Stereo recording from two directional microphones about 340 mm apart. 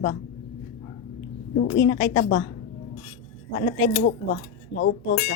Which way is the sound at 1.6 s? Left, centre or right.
Left.